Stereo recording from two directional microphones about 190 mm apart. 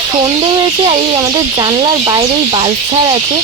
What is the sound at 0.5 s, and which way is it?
Speech, 20° right (ahead or behind).